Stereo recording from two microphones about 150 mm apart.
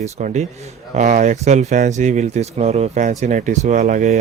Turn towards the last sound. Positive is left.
turn(degrees=-55)  # may be behind; listen again after turning